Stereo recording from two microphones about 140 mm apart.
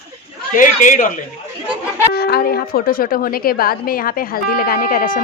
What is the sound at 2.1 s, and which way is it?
A woman's voice, 90° left.